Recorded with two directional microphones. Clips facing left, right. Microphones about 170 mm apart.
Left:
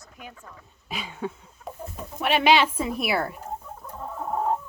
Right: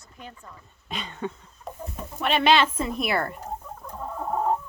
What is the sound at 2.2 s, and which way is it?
A woman's voice, 10° left (ahead or behind).